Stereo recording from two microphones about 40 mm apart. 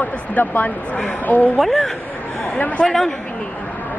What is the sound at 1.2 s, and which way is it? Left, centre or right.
Speech, left.